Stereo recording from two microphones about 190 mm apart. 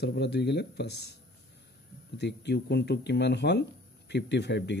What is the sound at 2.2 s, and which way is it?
Speech, 65° left (ahead or behind).